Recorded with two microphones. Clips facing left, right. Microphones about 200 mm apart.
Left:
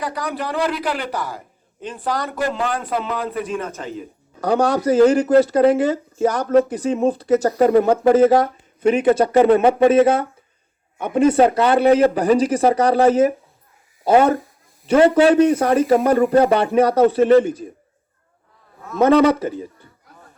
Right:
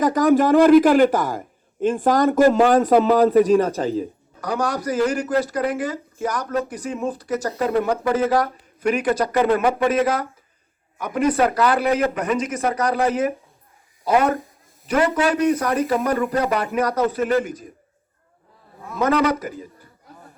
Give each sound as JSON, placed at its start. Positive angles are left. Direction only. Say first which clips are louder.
{"t": 0.0, "sound": "a man's voice", "louder": "right 10 dB", "side_deg": -45}
{"t": 4.4, "sound": "speech", "louder": "left 6 dB", "side_deg": 25}
{"t": 18.9, "sound": "speech", "louder": "left 6 dB", "side_deg": 30}